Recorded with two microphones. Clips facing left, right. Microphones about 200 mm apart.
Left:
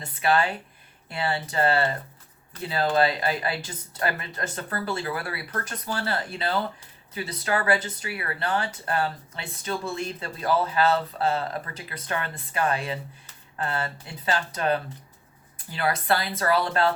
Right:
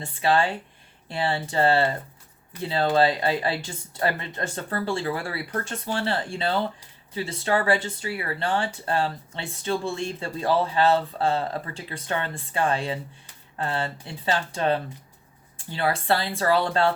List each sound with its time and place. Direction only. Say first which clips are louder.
0.0 s speech: right 1 dB; 30° right (ahead or behind)